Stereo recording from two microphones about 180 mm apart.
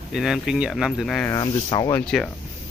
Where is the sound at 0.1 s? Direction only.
Centre (ahead or behind).